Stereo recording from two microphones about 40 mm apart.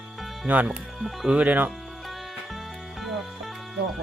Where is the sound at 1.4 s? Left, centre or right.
Right.